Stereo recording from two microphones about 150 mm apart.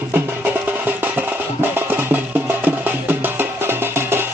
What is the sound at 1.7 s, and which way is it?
Music, 10° right (ahead or behind).